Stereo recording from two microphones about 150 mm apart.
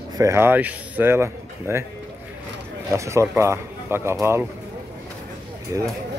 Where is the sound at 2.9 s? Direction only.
20° right (ahead or behind).